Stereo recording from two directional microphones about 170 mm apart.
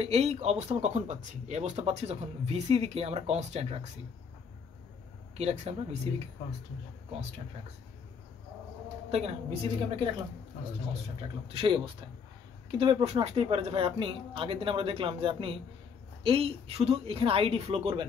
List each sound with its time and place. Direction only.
0.0 s speech: 40° right (ahead or behind)
5.4 s speech: 40° right (ahead or behind)
9.1 s speech: 35° right (ahead or behind)
11.4 s speech: 30° right (ahead or behind)